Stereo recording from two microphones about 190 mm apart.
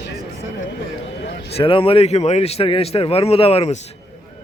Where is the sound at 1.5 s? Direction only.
30° left (ahead or behind).